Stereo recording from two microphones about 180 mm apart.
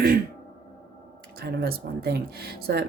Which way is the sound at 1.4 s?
60° right (ahead or behind).